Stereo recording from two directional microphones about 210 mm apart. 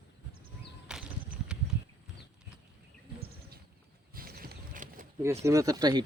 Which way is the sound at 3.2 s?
45° right (ahead or behind).